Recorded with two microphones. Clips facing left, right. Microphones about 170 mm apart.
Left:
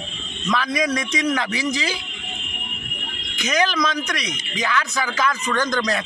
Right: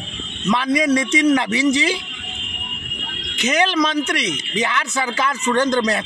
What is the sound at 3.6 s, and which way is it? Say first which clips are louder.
A man's voice: right 4 dB; 30° right (ahead or behind).